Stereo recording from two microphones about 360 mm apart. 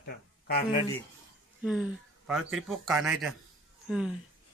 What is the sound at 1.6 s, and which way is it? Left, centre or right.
Speech, centre.